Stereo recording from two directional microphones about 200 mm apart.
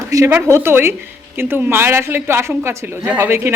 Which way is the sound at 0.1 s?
15° right (ahead or behind).